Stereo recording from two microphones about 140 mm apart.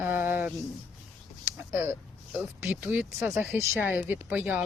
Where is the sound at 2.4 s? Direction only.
15° right (ahead or behind).